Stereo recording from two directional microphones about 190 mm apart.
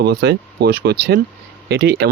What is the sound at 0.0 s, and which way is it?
Speech, 60° right (ahead or behind).